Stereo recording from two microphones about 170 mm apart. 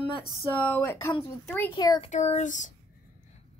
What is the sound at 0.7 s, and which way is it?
A woman's voice, 15° left (ahead or behind).